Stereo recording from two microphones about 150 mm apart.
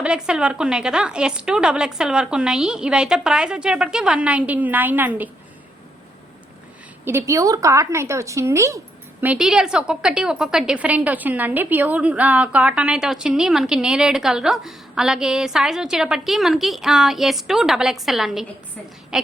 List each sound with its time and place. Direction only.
0.0 s a woman's voice: 5° right (ahead or behind)
7.0 s a woman's voice: 15° right (ahead or behind)
9.2 s a woman's voice: 5° right (ahead or behind)
19.1 s a sound: 5° right (ahead or behind)